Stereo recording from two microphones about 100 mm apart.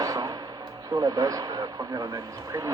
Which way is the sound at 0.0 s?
40° right (ahead or behind).